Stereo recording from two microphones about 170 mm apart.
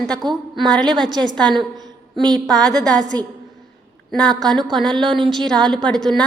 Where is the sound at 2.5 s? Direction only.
5° left (ahead or behind).